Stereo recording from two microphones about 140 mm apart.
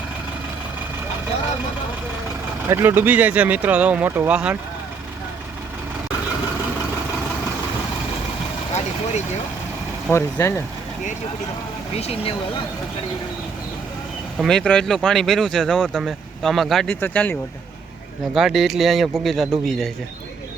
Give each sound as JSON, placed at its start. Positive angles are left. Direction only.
{"t": 2.6, "sound": "speech", "side_deg": -15}
{"t": 10.1, "sound": "speech", "side_deg": 20}
{"t": 11.9, "sound": "speech", "side_deg": 45}
{"t": 14.3, "sound": "speech", "side_deg": 5}
{"t": 18.3, "sound": "speech", "side_deg": 0}